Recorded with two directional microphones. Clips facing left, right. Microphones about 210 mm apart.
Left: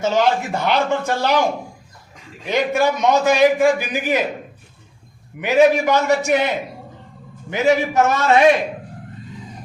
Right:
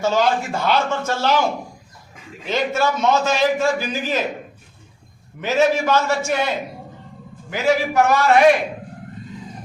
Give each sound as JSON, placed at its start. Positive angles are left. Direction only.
{"t": 0.0, "sound": "a man's voice", "side_deg": 20}
{"t": 2.5, "sound": "a man's voice", "side_deg": 15}
{"t": 5.4, "sound": "a man's voice", "side_deg": 15}
{"t": 7.5, "sound": "a man's voice", "side_deg": 20}